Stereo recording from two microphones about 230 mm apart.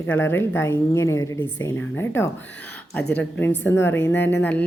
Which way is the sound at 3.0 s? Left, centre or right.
Left.